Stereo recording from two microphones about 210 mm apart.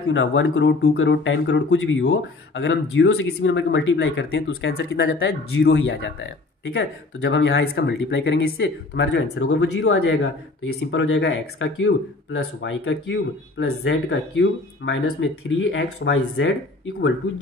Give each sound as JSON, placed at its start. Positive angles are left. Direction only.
{"t": 0.1, "sound": "speech", "side_deg": 65}